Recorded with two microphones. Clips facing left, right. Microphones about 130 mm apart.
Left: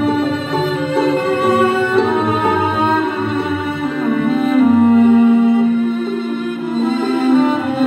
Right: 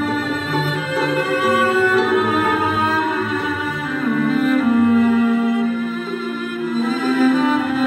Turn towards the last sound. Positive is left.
turn(degrees=30)  # may be behind; listen again after turning